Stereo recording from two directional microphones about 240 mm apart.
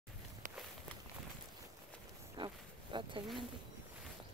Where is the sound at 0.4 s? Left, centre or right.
Right.